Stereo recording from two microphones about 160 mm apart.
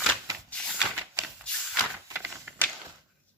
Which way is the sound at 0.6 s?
5° left (ahead or behind).